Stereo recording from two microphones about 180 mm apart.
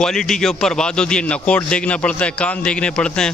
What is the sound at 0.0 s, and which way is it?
A man's voice, 5° left (ahead or behind).